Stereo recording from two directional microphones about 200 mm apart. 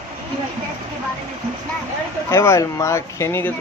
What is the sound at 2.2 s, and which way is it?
Speech, 15° left (ahead or behind).